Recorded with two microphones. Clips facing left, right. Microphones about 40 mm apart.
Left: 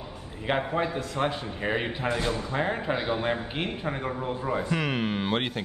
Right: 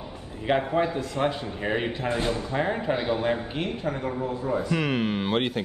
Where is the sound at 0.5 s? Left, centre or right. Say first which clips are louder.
Right 3 dB; centre.